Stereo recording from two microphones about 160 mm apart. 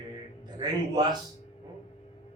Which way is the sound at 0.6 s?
25° right (ahead or behind).